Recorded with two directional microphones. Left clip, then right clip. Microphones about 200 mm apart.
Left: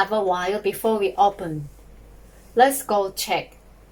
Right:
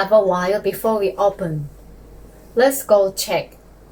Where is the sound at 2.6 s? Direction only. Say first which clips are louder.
Right 3 dB; 20° left (ahead or behind).